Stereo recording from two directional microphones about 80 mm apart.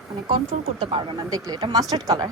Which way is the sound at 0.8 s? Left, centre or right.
Right.